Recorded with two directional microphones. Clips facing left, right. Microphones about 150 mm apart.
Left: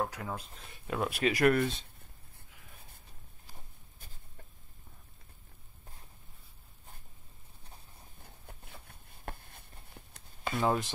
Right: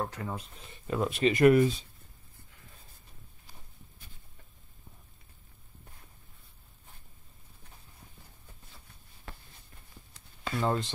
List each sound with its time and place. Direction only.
0.0 s speech: centre (ahead or behind)
8.5 s a sound: 60° left (ahead or behind)
10.4 s speech: 15° left (ahead or behind)